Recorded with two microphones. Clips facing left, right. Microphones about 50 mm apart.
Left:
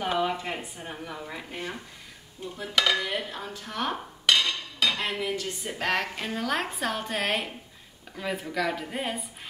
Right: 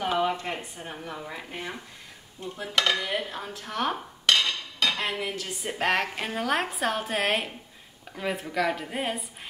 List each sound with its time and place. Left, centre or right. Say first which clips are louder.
0.0 s a woman's voice: right 1 dB; centre
4.3 s dishes: even; centre
5.8 s a woman's voice: right 3 dB; centre